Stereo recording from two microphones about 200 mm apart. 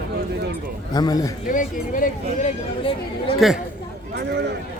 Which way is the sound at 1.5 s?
40° left (ahead or behind).